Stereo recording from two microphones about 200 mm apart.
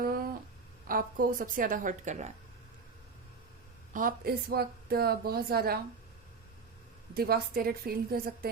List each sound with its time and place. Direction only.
0.0 s a sound: 45° right (ahead or behind)
0.9 s a woman's voice: 45° right (ahead or behind)
3.9 s a woman's voice: 45° right (ahead or behind)
7.1 s a woman's voice: 50° right (ahead or behind)